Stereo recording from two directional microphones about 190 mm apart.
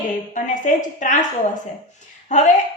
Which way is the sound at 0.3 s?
40° left (ahead or behind).